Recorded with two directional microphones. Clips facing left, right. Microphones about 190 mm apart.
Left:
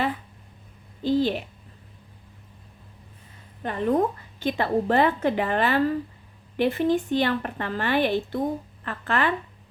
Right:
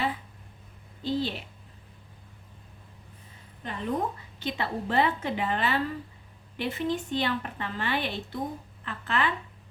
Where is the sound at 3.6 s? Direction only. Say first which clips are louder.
Left 8 dB; 55° left (ahead or behind).